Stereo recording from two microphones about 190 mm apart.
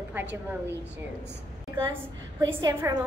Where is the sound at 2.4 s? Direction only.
20° right (ahead or behind).